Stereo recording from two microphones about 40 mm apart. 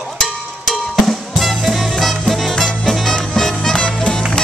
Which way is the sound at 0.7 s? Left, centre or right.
Centre.